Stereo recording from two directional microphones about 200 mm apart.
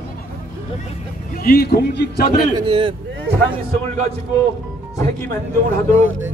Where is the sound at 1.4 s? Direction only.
55° left (ahead or behind).